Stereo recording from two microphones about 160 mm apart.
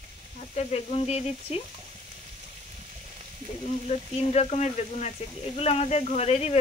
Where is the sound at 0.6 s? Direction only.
40° left (ahead or behind).